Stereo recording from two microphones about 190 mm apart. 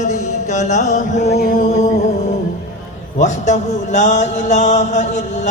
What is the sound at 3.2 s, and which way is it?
Mantra, 40° left (ahead or behind).